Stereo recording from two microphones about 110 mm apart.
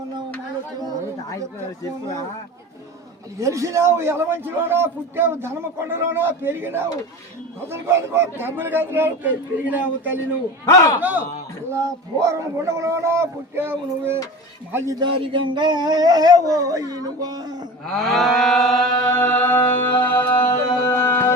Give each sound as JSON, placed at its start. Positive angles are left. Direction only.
{"t": 3.4, "sound": "a man's voice", "side_deg": -30}
{"t": 10.7, "sound": "a man's voice", "side_deg": 30}
{"t": 11.7, "sound": "a man's voice", "side_deg": -25}
{"t": 14.9, "sound": "speech", "side_deg": -50}
{"t": 17.8, "sound": "livestock", "side_deg": 0}
{"t": 19.2, "sound": "music", "side_deg": 15}